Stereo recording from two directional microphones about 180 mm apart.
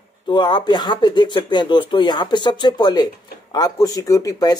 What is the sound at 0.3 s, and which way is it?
Speech, 25° left (ahead or behind).